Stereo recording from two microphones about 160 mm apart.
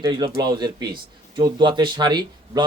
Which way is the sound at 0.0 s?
25° right (ahead or behind).